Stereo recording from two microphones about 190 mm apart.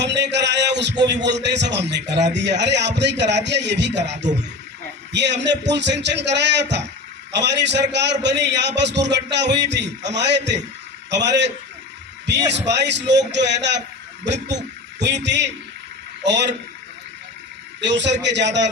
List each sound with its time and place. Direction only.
0.0 s a man's voice: 65° right (ahead or behind)
14.9 s a man's voice: 65° right (ahead or behind)
17.7 s a man's voice: 70° right (ahead or behind)